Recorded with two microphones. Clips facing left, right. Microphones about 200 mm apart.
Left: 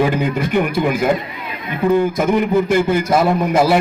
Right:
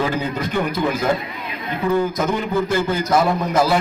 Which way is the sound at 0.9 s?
15° left (ahead or behind).